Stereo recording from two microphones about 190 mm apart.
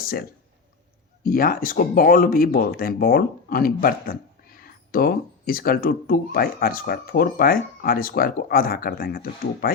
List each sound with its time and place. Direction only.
0.0 s speech: 50° left (ahead or behind)